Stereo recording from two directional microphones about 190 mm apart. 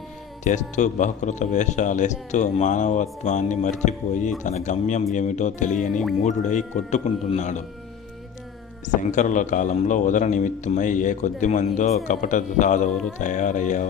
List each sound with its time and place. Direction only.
0.4 s speech: 40° left (ahead or behind)
9.0 s speech: 40° left (ahead or behind)